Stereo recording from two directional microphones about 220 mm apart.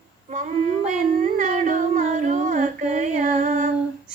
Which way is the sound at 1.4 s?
35° right (ahead or behind).